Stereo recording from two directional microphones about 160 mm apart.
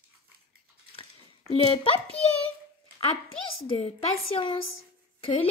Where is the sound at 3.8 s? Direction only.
40° left (ahead or behind).